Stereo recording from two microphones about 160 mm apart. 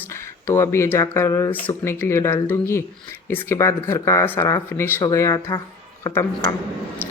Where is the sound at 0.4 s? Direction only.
15° left (ahead or behind).